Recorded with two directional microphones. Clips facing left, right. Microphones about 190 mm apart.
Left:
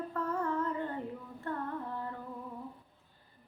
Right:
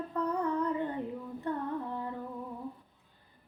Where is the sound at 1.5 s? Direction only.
15° right (ahead or behind).